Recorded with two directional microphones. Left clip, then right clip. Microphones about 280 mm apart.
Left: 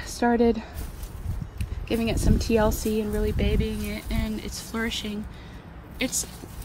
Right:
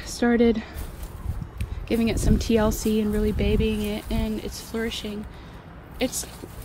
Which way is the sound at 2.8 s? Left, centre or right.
Left.